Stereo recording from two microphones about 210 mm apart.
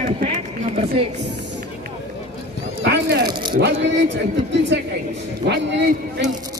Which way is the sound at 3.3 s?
20° right (ahead or behind).